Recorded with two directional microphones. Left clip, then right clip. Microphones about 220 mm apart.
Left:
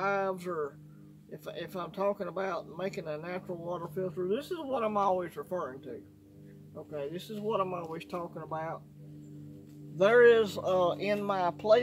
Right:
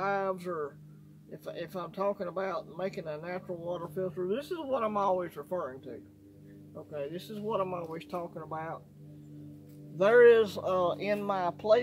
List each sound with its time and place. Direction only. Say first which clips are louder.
0.0 s speech: even; 10° right (ahead or behind)
9.9 s speech: right 1 dB; 20° right (ahead or behind)